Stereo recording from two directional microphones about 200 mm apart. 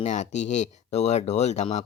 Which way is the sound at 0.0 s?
35° left (ahead or behind).